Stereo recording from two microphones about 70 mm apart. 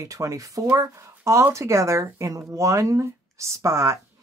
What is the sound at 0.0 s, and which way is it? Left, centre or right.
Speech, right.